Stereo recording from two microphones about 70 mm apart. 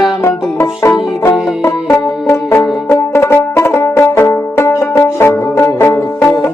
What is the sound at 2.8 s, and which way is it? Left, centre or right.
Music, left.